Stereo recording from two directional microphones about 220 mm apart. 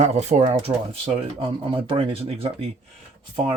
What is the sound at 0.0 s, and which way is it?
Speech, 30° right (ahead or behind).